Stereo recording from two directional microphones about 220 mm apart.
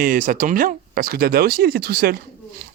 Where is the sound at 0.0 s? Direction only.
40° right (ahead or behind).